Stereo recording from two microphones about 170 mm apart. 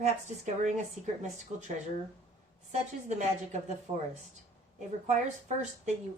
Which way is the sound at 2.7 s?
45° right (ahead or behind).